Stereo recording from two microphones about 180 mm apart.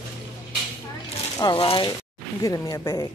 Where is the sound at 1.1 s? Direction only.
25° left (ahead or behind).